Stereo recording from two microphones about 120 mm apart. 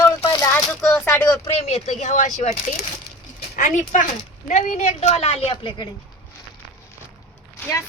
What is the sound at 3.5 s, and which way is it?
A woman's voice, 90° left.